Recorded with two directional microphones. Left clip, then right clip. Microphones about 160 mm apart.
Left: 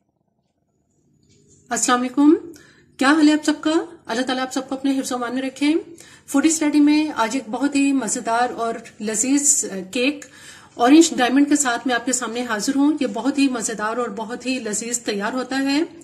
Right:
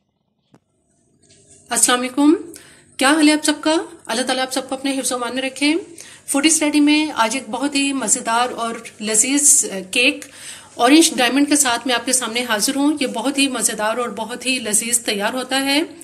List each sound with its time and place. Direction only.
1.7 s a woman's voice: 35° left (ahead or behind)